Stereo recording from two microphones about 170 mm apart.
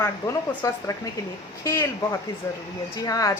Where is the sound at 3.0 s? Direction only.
20° left (ahead or behind).